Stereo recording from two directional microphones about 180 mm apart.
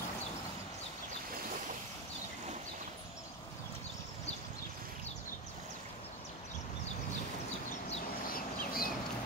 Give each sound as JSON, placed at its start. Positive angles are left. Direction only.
{"t": 8.3, "sound": "bird", "side_deg": 55}